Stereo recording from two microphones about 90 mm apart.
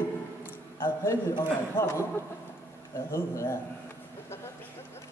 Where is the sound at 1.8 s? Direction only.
30° left (ahead or behind).